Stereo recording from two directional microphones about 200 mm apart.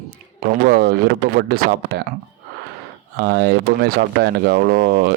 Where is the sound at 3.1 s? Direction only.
55° right (ahead or behind).